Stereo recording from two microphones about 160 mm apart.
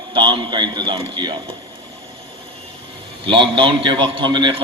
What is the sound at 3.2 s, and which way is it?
A man's voice, 30° right (ahead or behind).